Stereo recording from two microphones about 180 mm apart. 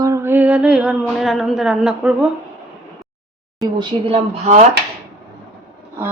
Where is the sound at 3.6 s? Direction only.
25° right (ahead or behind).